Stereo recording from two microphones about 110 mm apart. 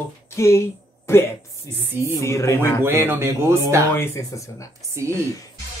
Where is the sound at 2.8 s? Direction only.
20° right (ahead or behind).